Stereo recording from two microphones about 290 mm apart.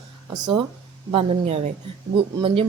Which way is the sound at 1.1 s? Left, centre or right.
Centre.